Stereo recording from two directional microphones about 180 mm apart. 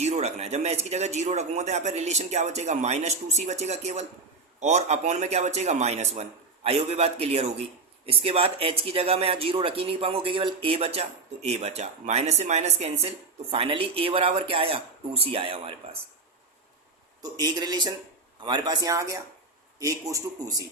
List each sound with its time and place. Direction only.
0.0 s speech: 35° right (ahead or behind)
17.3 s a man's voice: 20° right (ahead or behind)